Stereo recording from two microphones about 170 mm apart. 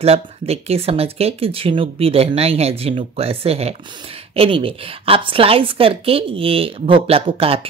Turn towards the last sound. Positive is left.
turn(degrees=-35)  # may be behind; listen again after turning